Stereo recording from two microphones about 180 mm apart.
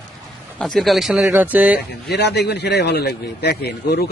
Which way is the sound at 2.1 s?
70° left (ahead or behind).